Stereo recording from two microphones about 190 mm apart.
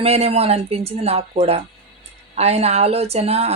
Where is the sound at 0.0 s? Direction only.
30° right (ahead or behind).